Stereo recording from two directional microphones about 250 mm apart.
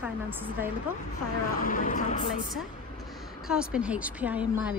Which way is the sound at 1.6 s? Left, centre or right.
Left.